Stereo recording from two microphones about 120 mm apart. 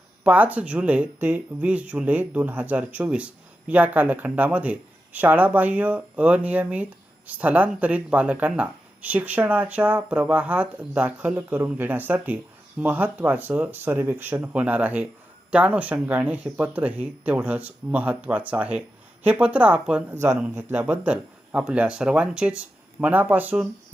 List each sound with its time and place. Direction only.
0.3 s speech: 15° right (ahead or behind)